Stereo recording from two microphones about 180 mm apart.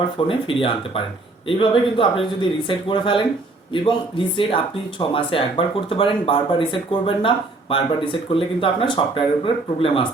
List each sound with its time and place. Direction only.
0.3 s speech: 30° left (ahead or behind)
4.4 s speech: 30° left (ahead or behind)